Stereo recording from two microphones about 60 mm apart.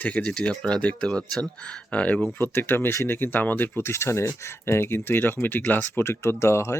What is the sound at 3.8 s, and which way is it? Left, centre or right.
Speech, left.